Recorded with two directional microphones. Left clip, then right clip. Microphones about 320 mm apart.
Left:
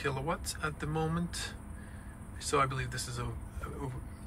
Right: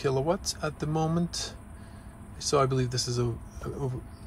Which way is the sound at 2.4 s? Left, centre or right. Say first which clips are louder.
Right 5 dB; centre.